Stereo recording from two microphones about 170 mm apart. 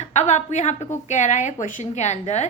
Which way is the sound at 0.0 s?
40° left (ahead or behind).